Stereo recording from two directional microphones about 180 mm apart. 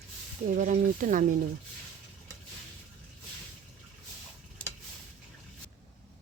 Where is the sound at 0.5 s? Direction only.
45° right (ahead or behind).